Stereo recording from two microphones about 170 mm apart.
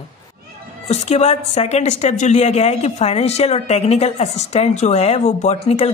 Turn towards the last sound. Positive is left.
turn(degrees=40)  # may be behind; listen again after turning